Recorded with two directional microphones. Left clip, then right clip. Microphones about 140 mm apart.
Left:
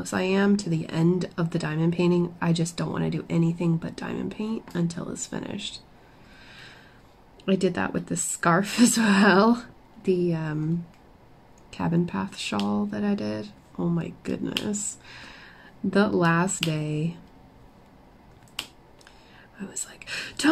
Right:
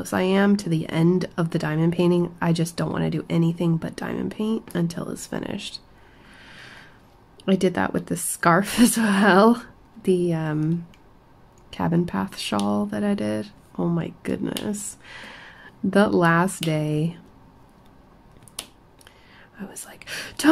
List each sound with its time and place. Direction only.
0.1 s speech: 20° right (ahead or behind)
6.4 s a sound: 15° right (ahead or behind)
7.4 s speech: 15° right (ahead or behind)
11.7 s speech: 20° right (ahead or behind)
15.0 s a sound: 20° right (ahead or behind)
16.1 s speech: 15° right (ahead or behind)
19.9 s speech: 25° right (ahead or behind)